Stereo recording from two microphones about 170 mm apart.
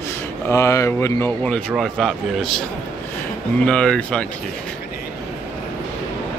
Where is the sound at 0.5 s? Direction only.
15° left (ahead or behind); by 2.6 s centre (ahead or behind).